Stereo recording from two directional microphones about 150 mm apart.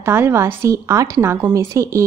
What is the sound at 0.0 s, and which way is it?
Speech, 15° right (ahead or behind).